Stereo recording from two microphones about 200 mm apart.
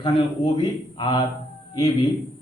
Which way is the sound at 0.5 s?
25° left (ahead or behind).